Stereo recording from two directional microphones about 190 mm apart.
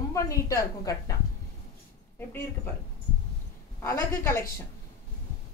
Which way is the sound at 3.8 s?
15° left (ahead or behind).